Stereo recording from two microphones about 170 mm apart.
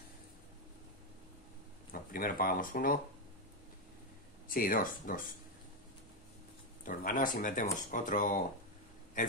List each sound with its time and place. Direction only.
1.9 s speech: 55° left (ahead or behind)
4.5 s speech: 55° left (ahead or behind)
6.8 s speech: 55° left (ahead or behind)